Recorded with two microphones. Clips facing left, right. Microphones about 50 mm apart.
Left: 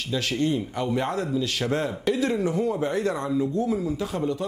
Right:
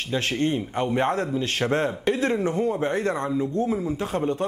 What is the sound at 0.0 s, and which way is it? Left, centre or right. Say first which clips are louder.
A man's voice: right 1 dB; right.